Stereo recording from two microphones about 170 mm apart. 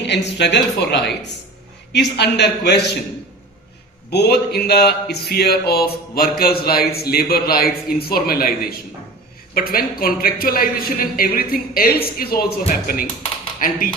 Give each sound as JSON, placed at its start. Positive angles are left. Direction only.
{"t": 0.0, "sound": "speech", "side_deg": 90}
{"t": 0.8, "sound": "a man's voice", "side_deg": 80}
{"t": 1.9, "sound": "a man's voice", "side_deg": 90}
{"t": 4.1, "sound": "speech", "side_deg": 75}